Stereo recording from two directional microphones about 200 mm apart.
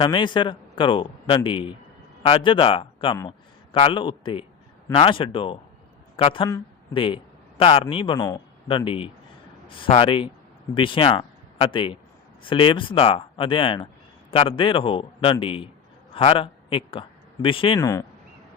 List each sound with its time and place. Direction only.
0.0 s a man's voice: 25° left (ahead or behind)